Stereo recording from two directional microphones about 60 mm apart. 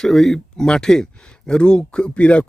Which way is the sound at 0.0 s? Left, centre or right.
Centre.